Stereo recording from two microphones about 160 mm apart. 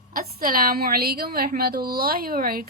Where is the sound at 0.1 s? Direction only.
65° right (ahead or behind).